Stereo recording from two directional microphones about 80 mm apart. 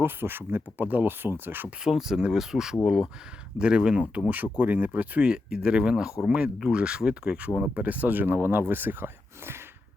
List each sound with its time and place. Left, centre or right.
0.0 s speech: right
1.8 s speech: centre
4.5 s speech: right